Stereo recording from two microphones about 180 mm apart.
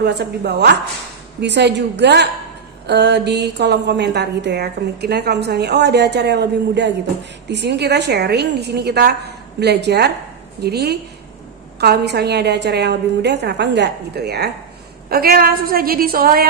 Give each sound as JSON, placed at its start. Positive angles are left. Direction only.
{"t": 0.0, "sound": "a woman's voice", "side_deg": -65}